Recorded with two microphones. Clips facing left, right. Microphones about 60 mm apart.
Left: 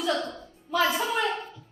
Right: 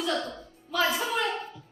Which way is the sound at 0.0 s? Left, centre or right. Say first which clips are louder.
Left 2 dB; centre.